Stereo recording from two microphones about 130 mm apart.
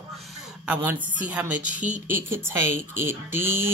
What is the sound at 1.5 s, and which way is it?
Speech, 75° right (ahead or behind).